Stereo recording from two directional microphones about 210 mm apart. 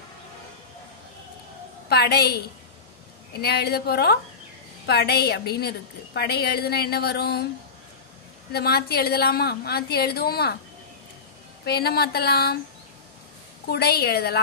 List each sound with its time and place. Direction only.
1.9 s a woman's voice: 50° left (ahead or behind)
3.3 s a woman's voice: 50° left (ahead or behind)
8.5 s a woman's voice: 50° left (ahead or behind)
11.6 s a woman's voice: 50° left (ahead or behind)
13.7 s a woman's voice: 50° left (ahead or behind)